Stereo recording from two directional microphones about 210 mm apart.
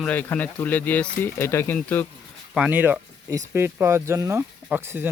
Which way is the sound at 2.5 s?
5° right (ahead or behind).